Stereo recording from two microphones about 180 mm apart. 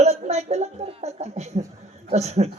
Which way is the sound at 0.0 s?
35° right (ahead or behind).